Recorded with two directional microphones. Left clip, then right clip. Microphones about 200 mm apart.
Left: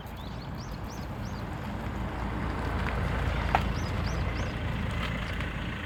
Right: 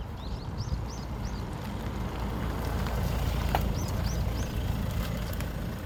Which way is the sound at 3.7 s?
30° left (ahead or behind).